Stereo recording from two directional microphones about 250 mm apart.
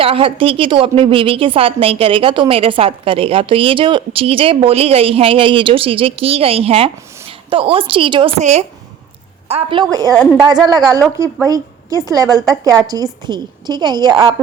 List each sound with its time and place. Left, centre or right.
0.0 s a woman's voice: right